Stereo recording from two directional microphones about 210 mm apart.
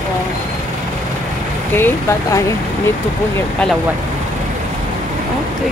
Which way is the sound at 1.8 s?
10° left (ahead or behind).